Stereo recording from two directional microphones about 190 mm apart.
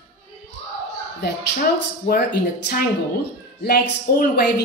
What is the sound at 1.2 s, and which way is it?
Speech, 55° left (ahead or behind).